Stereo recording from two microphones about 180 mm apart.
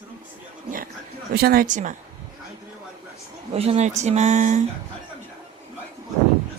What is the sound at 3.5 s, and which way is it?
Speech, 35° right (ahead or behind).